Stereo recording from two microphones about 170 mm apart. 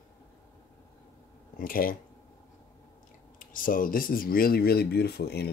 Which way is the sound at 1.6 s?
55° left (ahead or behind).